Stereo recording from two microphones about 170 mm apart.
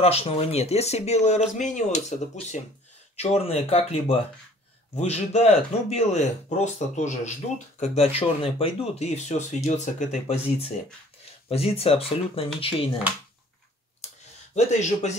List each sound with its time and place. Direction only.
0.0 s speech: 35° left (ahead or behind)
14.5 s speech: 45° left (ahead or behind)